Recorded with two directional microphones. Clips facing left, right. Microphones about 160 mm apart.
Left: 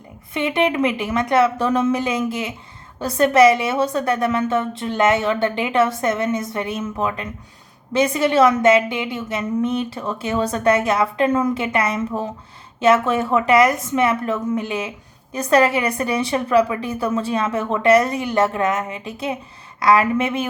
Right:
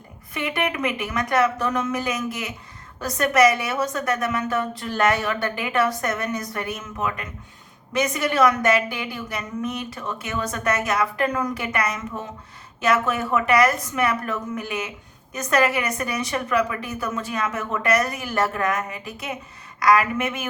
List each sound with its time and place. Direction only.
0.3 s a woman's voice: 25° left (ahead or behind)